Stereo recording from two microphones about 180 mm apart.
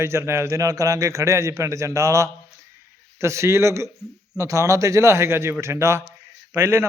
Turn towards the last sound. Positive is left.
turn(degrees=-15)  # may be behind; listen again after turning